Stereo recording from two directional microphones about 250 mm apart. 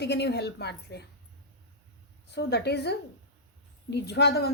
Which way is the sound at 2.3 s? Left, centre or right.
Left.